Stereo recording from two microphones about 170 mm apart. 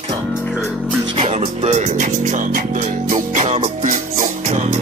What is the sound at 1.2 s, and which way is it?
Music, 40° right (ahead or behind).